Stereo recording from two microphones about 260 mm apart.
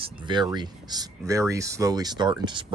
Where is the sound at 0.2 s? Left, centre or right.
Centre.